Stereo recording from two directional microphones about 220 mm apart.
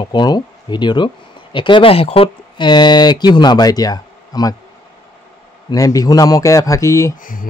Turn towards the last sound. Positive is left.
turn(degrees=40)  # may be behind; listen again after turning